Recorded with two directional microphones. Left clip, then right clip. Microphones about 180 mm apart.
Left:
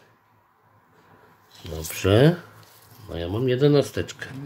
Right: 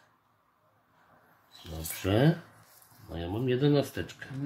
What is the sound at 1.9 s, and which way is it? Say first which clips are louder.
Speech: left 9 dB; 35° left (ahead or behind).